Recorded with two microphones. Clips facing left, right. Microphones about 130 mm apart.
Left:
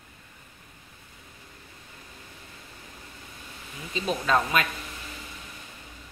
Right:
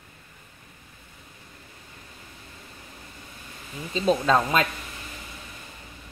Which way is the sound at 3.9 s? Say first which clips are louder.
Right 4 dB; 30° right (ahead or behind).